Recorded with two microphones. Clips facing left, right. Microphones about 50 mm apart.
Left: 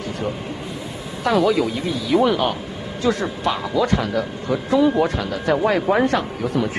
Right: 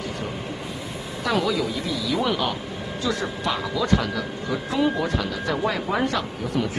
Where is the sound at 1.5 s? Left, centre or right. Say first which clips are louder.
Left 5 dB; left.